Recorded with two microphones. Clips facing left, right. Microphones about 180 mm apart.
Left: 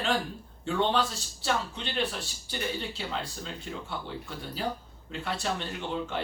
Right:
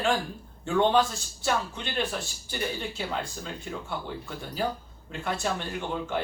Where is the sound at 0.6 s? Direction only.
50° right (ahead or behind).